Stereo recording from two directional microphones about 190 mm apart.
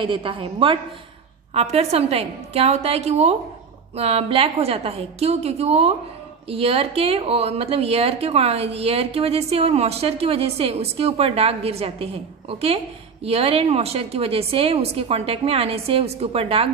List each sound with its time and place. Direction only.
0.0 s a woman's voice: 25° right (ahead or behind)